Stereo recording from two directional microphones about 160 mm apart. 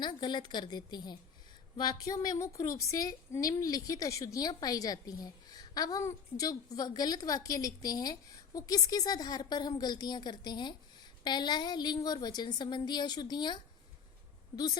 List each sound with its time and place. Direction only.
0.0 s a woman's voice: 25° left (ahead or behind)